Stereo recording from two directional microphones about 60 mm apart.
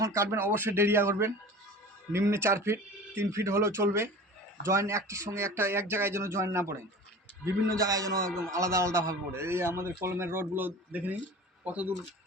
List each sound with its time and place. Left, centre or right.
0.0 s speech: right
0.3 s speech: right
7.8 s a man's voice: right
8.4 s speech: right
9.3 s speech: right